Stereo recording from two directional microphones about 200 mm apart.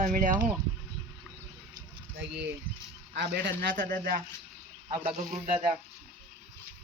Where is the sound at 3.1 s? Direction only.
55° right (ahead or behind).